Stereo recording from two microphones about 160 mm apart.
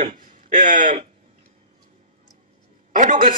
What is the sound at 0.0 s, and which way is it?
Speech, 55° right (ahead or behind).